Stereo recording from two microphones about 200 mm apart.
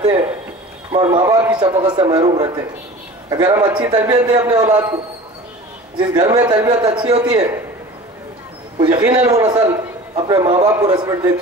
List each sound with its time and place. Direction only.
0.9 s a man's voice: 20° right (ahead or behind)
8.7 s a man's voice: 25° right (ahead or behind)